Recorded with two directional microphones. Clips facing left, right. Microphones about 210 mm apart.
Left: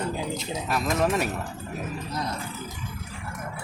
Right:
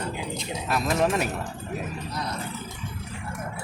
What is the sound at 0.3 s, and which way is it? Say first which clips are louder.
Speech: even; centre (ahead or behind).